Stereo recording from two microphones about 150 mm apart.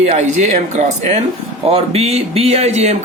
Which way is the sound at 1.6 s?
40° right (ahead or behind).